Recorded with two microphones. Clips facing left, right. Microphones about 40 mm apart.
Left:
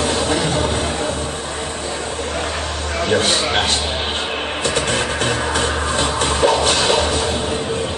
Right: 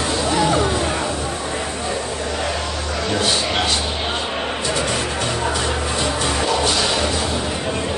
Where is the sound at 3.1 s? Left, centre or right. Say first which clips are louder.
Left 3 dB; left.